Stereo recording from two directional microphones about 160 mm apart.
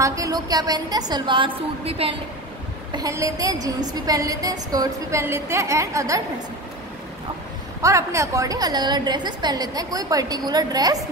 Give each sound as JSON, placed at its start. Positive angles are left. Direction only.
{"t": 0.0, "sound": "a woman's voice", "side_deg": -20}
{"t": 2.9, "sound": "a woman's voice", "side_deg": -20}
{"t": 7.8, "sound": "a woman's voice", "side_deg": -20}